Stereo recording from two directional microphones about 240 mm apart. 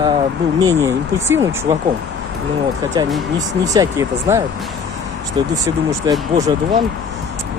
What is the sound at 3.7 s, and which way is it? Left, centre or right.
Speech, centre.